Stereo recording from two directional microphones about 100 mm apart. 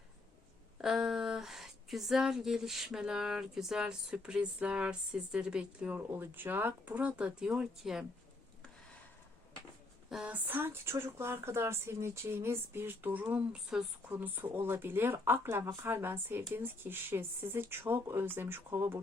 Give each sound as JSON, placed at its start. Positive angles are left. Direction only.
{"t": 0.8, "sound": "speech", "side_deg": -5}
{"t": 6.1, "sound": "speech", "side_deg": -20}
{"t": 10.2, "sound": "speech", "side_deg": -15}
{"t": 14.1, "sound": "speech", "side_deg": -15}